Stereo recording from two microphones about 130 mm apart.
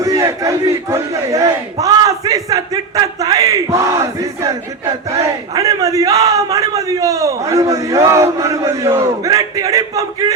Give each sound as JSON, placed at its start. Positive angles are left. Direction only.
{"t": 0.0, "sound": "battle cry", "side_deg": -25}
{"t": 5.1, "sound": "a man's voice", "side_deg": -25}